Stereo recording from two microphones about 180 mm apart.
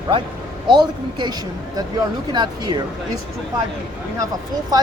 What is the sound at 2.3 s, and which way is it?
Speech, 25° right (ahead or behind).